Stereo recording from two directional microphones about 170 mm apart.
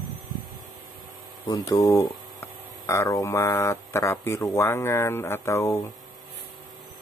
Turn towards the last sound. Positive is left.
turn(degrees=15)  # may be behind; listen again after turning